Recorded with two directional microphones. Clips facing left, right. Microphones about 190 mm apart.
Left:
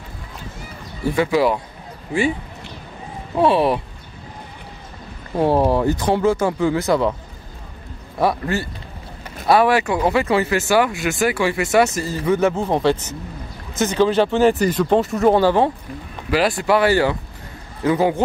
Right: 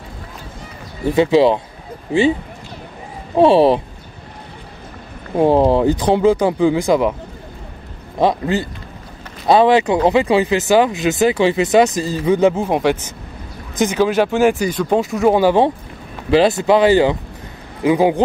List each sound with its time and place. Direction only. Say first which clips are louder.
1.1 s speech: right 5 dB; 25° right (ahead or behind)
3.3 s speech: right 5 dB; 30° right (ahead or behind)
5.3 s speech: right 4 dB; 20° right (ahead or behind)
8.2 s speech: right 3 dB; 20° right (ahead or behind)